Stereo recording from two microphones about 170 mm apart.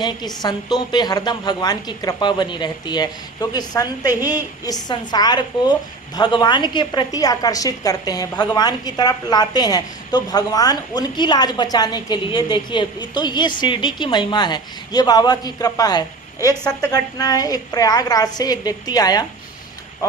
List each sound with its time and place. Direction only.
0.0 s a woman's voice: 25° left (ahead or behind)